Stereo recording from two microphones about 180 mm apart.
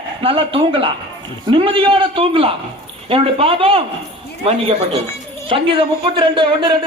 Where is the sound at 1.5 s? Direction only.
30° right (ahead or behind).